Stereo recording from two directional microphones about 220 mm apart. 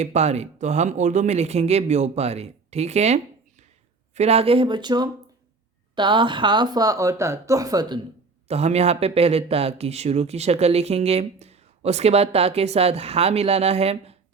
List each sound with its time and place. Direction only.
0.0 s speech: 30° right (ahead or behind)
8.4 s speech: 30° right (ahead or behind)